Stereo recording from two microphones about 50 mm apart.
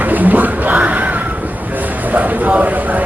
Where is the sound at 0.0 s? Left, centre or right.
Right.